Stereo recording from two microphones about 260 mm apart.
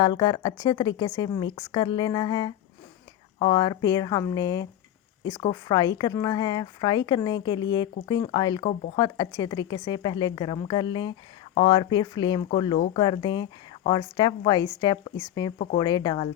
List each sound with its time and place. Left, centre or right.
0.0 s speech: centre
15.5 s speech: left
15.8 s speech: centre